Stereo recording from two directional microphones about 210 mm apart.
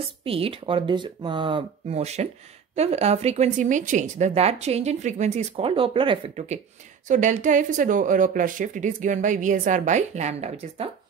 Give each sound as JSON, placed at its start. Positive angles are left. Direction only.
{"t": 0.2, "sound": "speech", "side_deg": -25}